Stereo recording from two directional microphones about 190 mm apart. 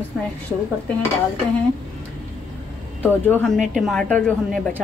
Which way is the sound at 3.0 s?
10° left (ahead or behind).